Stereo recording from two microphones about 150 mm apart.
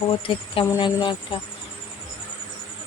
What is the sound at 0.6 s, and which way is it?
Speech, 25° left (ahead or behind).